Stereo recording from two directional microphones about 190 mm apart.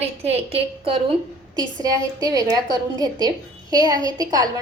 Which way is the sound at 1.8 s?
20° right (ahead or behind).